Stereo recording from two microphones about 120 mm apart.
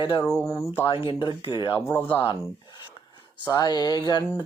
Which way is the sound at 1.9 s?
15° left (ahead or behind).